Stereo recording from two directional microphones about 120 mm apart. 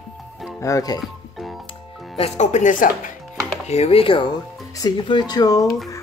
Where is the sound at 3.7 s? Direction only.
60° left (ahead or behind).